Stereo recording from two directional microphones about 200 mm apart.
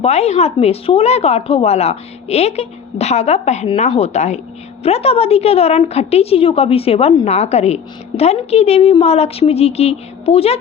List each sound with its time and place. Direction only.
0.0 s a woman's voice: 30° left (ahead or behind)